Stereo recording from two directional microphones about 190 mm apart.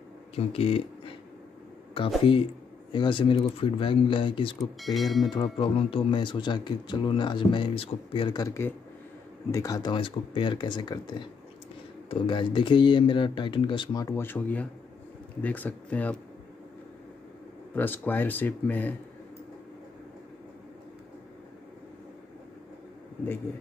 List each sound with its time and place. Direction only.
0.4 s speech: 30° left (ahead or behind)
4.9 s speech: centre (ahead or behind)
5.3 s speech: 25° left (ahead or behind); by 16.2 s 10° left (ahead or behind)
17.7 s speech: 10° left (ahead or behind)